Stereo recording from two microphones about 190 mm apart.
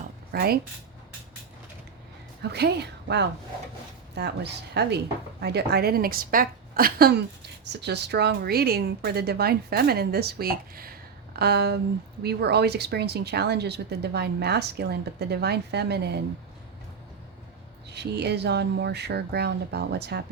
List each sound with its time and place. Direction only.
0.3 s speech: 55° right (ahead or behind)
2.4 s a woman's voice: 60° right (ahead or behind)
17.9 s speech: 60° right (ahead or behind)